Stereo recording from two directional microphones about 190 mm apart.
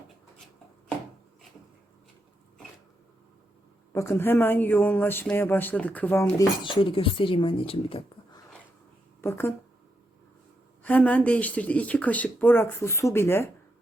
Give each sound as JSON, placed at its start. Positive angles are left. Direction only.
{"t": 3.9, "sound": "speech", "side_deg": 15}
{"t": 6.6, "sound": "speech", "side_deg": 25}
{"t": 9.2, "sound": "speech", "side_deg": 10}
{"t": 10.8, "sound": "speech", "side_deg": 10}